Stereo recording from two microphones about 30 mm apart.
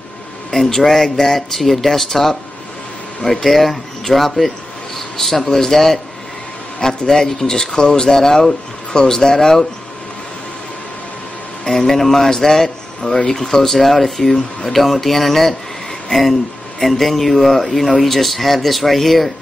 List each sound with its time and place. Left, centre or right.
0.5 s speech: centre
3.4 s speech: centre
11.6 s a man's voice: centre
13.7 s speech: centre